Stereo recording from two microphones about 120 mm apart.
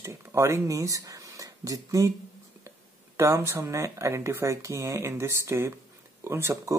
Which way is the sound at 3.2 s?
25° right (ahead or behind).